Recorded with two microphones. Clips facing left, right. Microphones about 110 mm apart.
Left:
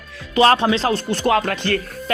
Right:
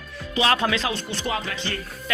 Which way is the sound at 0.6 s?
30° left (ahead or behind).